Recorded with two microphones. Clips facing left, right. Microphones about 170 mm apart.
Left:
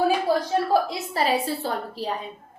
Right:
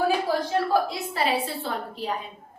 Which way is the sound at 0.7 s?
40° left (ahead or behind).